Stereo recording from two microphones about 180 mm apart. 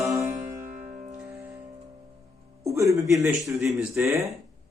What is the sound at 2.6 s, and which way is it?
Music, 15° right (ahead or behind).